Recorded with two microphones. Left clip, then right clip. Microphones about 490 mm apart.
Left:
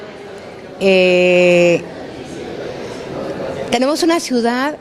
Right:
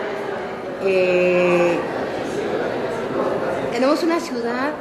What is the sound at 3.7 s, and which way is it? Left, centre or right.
A woman's voice, left.